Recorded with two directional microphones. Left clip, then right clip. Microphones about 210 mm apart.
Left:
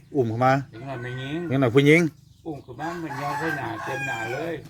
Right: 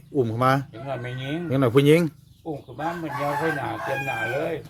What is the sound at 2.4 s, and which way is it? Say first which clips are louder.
Speech: right 2 dB; 35° right (ahead or behind).